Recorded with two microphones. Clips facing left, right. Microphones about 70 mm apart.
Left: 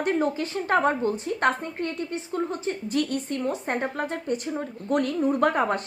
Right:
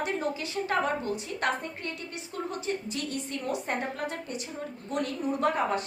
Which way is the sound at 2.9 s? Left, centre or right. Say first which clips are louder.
Left 8 dB; left.